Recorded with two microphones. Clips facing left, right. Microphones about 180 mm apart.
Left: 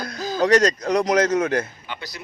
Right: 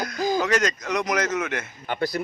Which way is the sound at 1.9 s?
50° right (ahead or behind).